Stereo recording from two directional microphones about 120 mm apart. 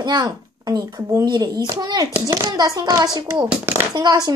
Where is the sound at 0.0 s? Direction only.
35° right (ahead or behind).